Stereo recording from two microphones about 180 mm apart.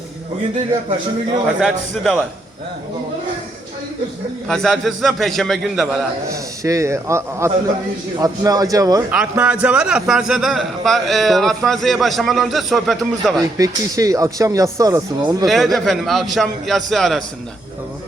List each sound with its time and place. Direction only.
1.6 s a man's voice: centre (ahead or behind)
4.4 s a man's voice: 5° left (ahead or behind)
6.3 s a man's voice: 20° right (ahead or behind)
9.0 s a man's voice: 10° right (ahead or behind)
13.6 s speech: 20° right (ahead or behind)
15.4 s a man's voice: centre (ahead or behind)